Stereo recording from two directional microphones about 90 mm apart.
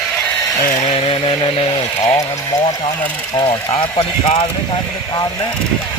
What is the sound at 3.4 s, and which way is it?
Speech, 70° left (ahead or behind).